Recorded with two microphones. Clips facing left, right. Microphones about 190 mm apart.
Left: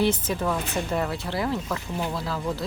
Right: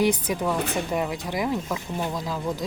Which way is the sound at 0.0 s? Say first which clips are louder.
Right 1 dB; 15° right (ahead or behind).